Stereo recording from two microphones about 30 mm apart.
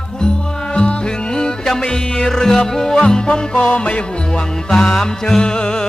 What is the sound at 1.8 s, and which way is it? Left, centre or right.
Music, left.